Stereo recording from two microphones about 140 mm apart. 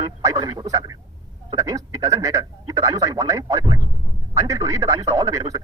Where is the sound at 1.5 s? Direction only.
25° right (ahead or behind).